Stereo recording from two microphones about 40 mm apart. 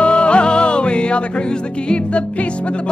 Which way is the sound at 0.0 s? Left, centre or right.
Left.